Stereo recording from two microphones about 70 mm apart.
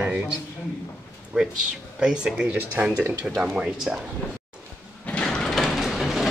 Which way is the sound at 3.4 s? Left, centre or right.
Centre.